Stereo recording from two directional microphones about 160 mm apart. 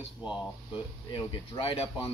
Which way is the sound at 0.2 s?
5° right (ahead or behind).